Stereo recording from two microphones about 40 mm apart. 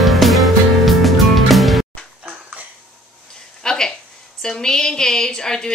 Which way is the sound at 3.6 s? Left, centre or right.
Centre.